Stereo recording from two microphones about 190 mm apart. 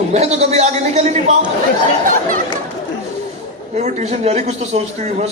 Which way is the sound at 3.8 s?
35° right (ahead or behind).